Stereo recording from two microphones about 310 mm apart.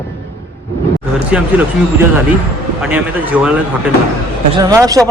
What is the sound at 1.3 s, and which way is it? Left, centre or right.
Speech, centre.